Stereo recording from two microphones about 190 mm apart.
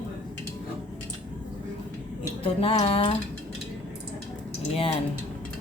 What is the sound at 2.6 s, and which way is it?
Speech, 30° left (ahead or behind).